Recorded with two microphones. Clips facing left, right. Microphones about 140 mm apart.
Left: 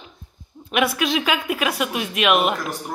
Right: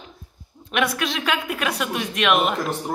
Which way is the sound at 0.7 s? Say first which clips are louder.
Left 3 dB; 5° left (ahead or behind).